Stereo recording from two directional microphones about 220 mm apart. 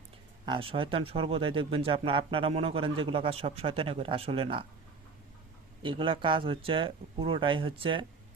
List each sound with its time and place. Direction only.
0.4 s speech: 25° right (ahead or behind)
5.8 s speech: 25° right (ahead or behind)